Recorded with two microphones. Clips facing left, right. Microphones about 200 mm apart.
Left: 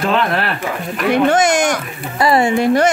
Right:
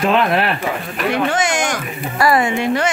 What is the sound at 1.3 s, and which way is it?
Speech, 40° left (ahead or behind).